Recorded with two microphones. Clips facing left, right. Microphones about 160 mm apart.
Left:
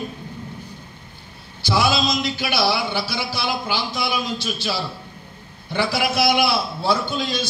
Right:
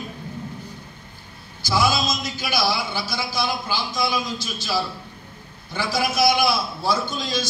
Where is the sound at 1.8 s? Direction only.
65° left (ahead or behind).